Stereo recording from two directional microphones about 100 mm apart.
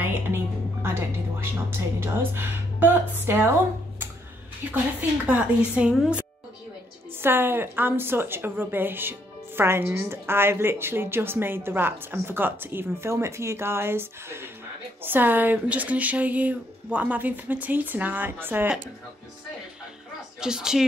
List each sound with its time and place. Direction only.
0.8 s a woman's voice: 25° right (ahead or behind)
5.2 s speech: 10° right (ahead or behind)
7.2 s a woman's voice: 20° right (ahead or behind)
20.3 s speech: 5° right (ahead or behind)